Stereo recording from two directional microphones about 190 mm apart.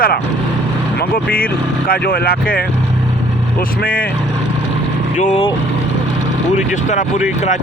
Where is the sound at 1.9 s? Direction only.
55° left (ahead or behind).